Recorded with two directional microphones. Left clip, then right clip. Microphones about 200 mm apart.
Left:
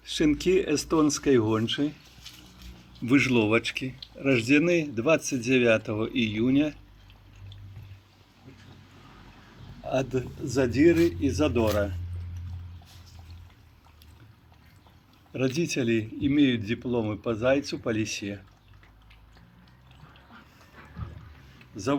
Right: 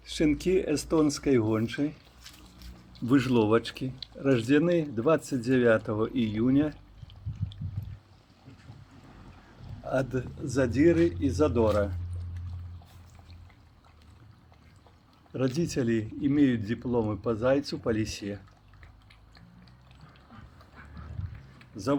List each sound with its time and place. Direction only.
0.0 s speech: 15° right (ahead or behind)
3.1 s speech: 20° right (ahead or behind)
9.8 s speech: 15° right (ahead or behind)
15.3 s speech: 15° right (ahead or behind)
21.7 s speech: 20° right (ahead or behind)